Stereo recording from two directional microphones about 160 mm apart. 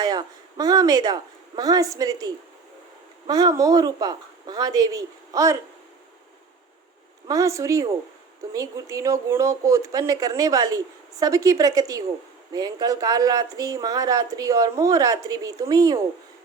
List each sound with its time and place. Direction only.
0.0 s speech: 25° right (ahead or behind)
7.3 s speech: 20° right (ahead or behind)